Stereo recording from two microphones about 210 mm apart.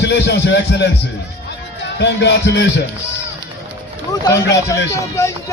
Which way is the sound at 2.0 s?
55° left (ahead or behind).